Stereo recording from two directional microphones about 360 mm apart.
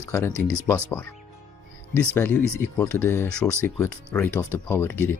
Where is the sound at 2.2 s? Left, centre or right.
Centre.